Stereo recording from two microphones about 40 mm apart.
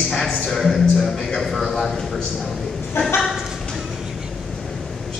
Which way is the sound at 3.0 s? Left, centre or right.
Left.